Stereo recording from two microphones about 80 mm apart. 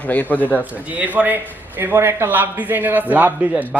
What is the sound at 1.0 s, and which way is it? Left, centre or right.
A man's voice, right.